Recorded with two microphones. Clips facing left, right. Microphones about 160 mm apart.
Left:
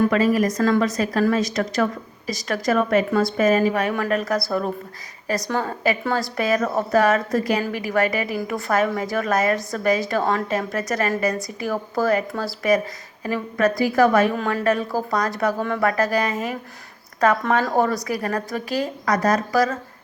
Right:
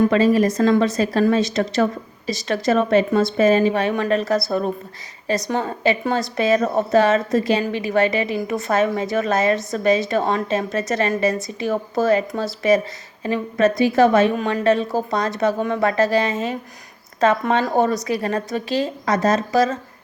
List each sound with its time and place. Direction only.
0.0 s a woman's voice: 25° right (ahead or behind)